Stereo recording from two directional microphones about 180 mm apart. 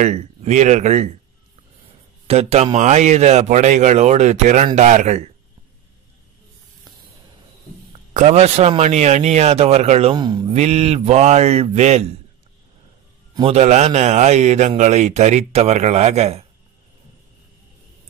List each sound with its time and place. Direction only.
0.0 s a man's voice: 35° right (ahead or behind)
2.2 s a man's voice: 35° right (ahead or behind)
8.1 s a man's voice: 40° right (ahead or behind); by 10.5 s 25° right (ahead or behind)
10.5 s a man's voice: 40° right (ahead or behind)
13.3 s a man's voice: 30° right (ahead or behind)